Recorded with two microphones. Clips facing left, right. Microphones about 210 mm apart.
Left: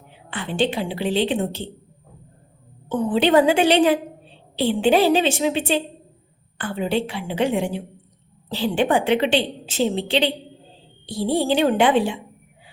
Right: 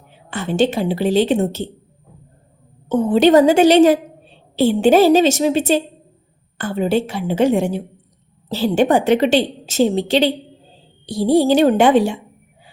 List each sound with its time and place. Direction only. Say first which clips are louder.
0.3 s a woman's voice: right 5 dB; 45° right (ahead or behind)
2.9 s a woman's voice: right 5 dB; 45° right (ahead or behind)